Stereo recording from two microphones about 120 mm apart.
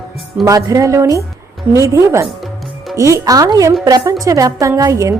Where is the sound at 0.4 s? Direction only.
30° right (ahead or behind).